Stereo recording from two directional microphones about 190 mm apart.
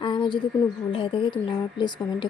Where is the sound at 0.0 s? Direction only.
25° left (ahead or behind).